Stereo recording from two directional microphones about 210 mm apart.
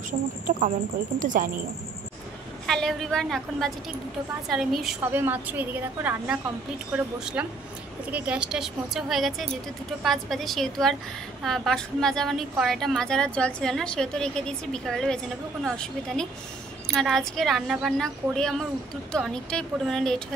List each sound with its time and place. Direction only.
1.2 s a woman's voice: 40° right (ahead or behind)
2.6 s a woman's voice: centre (ahead or behind)